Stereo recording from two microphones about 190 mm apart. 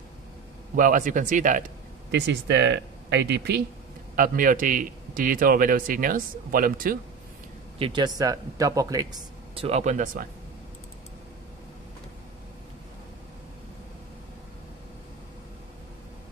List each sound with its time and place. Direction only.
0.7 s a man's voice: 45° right (ahead or behind)
2.0 s speech: 65° right (ahead or behind)
4.1 s a man's voice: 45° right (ahead or behind)
7.8 s speech: 25° right (ahead or behind)
9.7 s speech: 35° right (ahead or behind)